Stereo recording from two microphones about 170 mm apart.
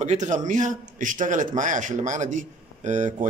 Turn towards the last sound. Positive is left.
turn(degrees=-45)  # may be behind; listen again after turning